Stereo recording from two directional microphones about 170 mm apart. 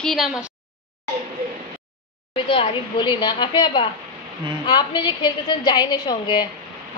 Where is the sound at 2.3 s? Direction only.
30° left (ahead or behind).